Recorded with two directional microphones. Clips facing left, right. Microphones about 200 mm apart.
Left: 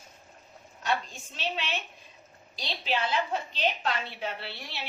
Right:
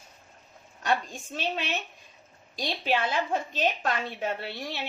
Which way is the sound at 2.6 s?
50° right (ahead or behind).